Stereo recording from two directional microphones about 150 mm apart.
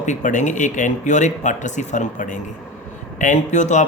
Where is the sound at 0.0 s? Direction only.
55° left (ahead or behind).